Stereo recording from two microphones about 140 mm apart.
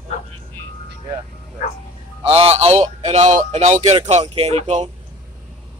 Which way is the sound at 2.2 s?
45° right (ahead or behind).